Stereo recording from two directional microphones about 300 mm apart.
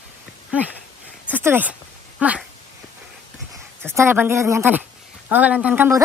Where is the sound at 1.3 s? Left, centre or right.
Centre.